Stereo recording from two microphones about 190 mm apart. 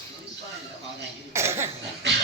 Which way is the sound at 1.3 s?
15° right (ahead or behind).